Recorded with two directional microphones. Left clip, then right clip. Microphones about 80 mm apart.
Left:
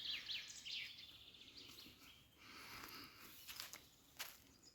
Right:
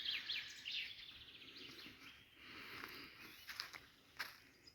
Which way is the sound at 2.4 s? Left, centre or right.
Left.